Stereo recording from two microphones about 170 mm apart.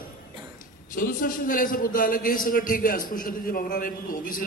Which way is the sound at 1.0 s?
55° left (ahead or behind).